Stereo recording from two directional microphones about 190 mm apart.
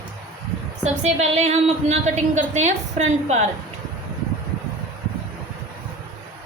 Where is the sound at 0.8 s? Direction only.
35° right (ahead or behind).